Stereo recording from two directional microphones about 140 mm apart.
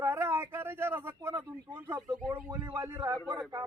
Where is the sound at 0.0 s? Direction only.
15° right (ahead or behind).